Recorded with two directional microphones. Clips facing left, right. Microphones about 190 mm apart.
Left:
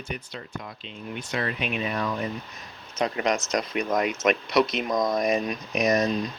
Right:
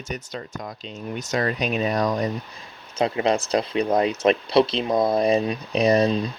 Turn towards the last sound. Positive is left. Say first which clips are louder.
# right 4 dB
turn(degrees=-30)  # may be behind; listen again after turning